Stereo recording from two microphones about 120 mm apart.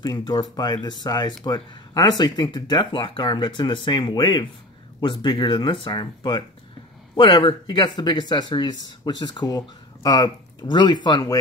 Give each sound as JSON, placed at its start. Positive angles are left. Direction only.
{"t": 0.0, "sound": "speech", "side_deg": 35}